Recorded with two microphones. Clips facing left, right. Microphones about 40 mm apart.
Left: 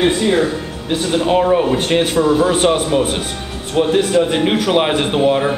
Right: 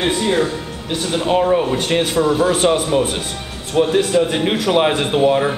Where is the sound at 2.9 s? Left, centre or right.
Centre.